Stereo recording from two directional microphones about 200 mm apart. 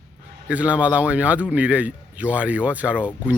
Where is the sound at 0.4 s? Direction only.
5° right (ahead or behind).